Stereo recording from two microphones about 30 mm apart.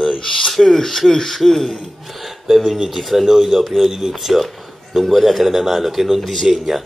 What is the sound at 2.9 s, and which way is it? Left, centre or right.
Speech, centre.